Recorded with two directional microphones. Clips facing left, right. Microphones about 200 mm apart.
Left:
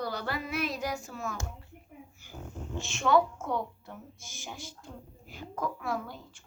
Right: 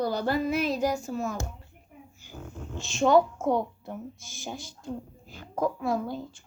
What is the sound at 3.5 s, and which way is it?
Speech, 25° right (ahead or behind).